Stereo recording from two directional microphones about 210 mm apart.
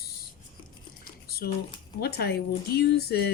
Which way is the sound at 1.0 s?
45° left (ahead or behind).